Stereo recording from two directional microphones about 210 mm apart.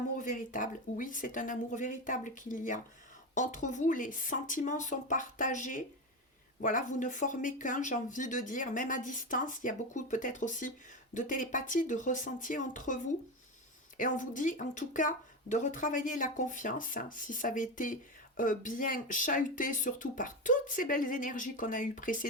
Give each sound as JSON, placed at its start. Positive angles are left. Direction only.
{"t": 0.2, "sound": "speech", "side_deg": 40}